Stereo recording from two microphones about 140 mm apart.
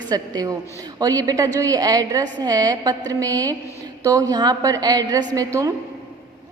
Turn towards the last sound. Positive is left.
turn(degrees=-25)  # may be behind; listen again after turning